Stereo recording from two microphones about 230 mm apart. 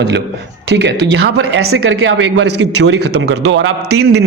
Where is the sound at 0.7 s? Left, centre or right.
Right.